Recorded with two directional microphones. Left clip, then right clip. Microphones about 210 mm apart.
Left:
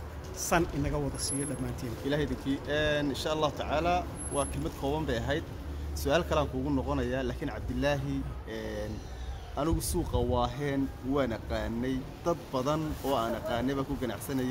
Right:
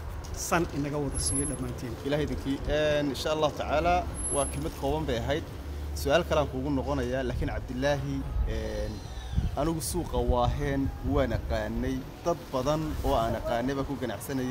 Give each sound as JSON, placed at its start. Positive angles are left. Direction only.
{"t": 0.4, "sound": "speech", "side_deg": 20}
{"t": 2.0, "sound": "speech", "side_deg": -5}